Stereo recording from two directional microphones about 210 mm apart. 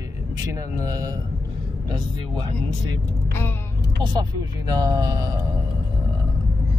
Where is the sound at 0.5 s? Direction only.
15° right (ahead or behind).